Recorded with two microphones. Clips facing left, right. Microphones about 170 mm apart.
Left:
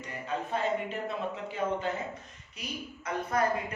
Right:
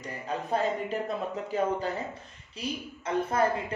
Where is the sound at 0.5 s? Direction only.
40° right (ahead or behind).